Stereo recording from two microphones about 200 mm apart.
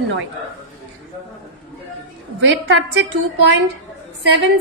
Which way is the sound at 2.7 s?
60° right (ahead or behind).